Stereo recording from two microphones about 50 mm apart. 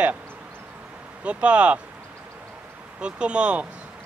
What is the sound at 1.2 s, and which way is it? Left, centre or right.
Speech, right.